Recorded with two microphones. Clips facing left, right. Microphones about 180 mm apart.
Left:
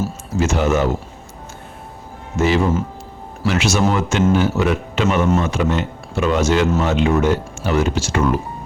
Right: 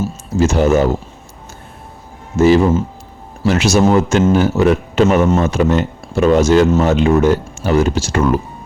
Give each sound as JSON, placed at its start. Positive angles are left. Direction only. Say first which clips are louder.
{"t": 0.3, "sound": "a man's voice", "louder": "right 5 dB", "side_deg": -35}
{"t": 2.3, "sound": "a man's voice", "louder": "right 6 dB", "side_deg": -40}